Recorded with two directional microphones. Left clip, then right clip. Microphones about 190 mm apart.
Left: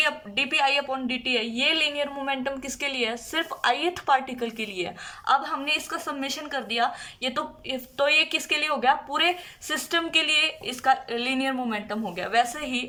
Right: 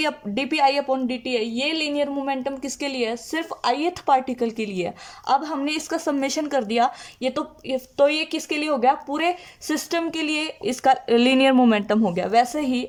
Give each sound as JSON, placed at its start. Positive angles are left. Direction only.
{"t": 0.0, "sound": "a woman's voice", "side_deg": -30}